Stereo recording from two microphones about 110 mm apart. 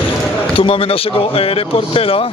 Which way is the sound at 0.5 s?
55° left (ahead or behind).